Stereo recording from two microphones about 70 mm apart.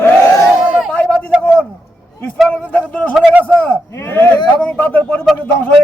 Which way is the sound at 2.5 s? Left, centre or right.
Left.